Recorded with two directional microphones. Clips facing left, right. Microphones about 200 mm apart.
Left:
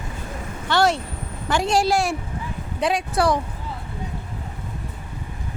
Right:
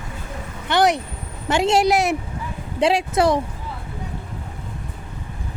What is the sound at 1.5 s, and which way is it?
A woman's voice, 20° right (ahead or behind).